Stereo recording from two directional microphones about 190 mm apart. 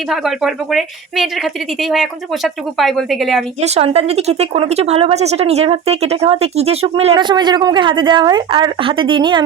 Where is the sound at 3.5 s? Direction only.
35° right (ahead or behind).